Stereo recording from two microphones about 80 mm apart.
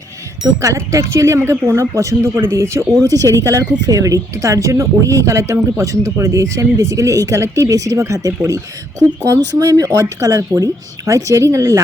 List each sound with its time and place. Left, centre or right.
0.6 s speech: right